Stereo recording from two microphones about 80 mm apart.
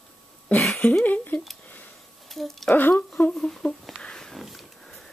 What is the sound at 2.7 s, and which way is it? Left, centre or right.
Speech, left.